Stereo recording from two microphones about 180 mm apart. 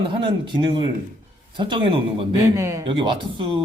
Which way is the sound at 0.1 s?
25° right (ahead or behind).